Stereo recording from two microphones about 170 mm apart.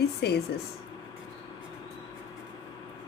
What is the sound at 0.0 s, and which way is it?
Speech, 70° left (ahead or behind).